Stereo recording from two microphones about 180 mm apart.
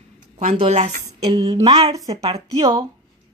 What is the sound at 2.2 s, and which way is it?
Speech, 35° right (ahead or behind).